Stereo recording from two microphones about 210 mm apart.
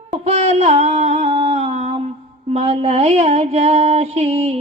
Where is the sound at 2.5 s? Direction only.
30° right (ahead or behind).